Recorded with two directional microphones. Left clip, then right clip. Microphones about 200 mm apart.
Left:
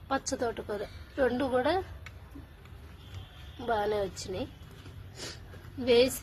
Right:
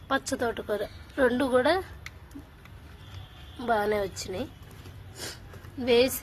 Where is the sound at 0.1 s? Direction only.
15° right (ahead or behind).